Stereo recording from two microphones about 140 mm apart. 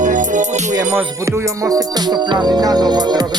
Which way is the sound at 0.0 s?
65° right (ahead or behind).